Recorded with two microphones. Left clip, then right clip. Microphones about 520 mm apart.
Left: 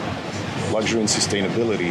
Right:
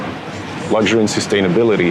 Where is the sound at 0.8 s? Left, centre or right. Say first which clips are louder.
Right 6 dB; right.